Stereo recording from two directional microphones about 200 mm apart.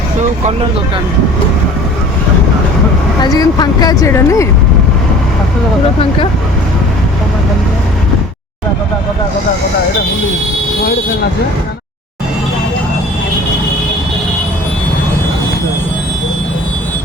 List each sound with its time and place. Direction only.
3.2 s speech: 20° left (ahead or behind)